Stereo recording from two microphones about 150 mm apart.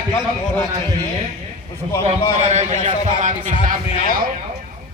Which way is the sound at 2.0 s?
50° right (ahead or behind).